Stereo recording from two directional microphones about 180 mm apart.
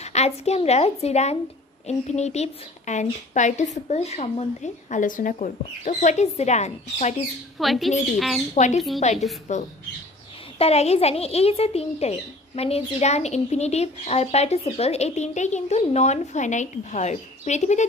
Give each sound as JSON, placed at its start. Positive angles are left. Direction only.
{"t": 0.0, "sound": "speech", "side_deg": 35}
{"t": 7.5, "sound": "a woman's voice", "side_deg": 0}
{"t": 8.5, "sound": "speech", "side_deg": 40}